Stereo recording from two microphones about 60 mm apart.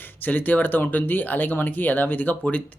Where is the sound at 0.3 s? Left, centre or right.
Left.